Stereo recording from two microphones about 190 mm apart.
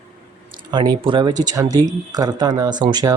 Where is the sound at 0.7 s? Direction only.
25° right (ahead or behind).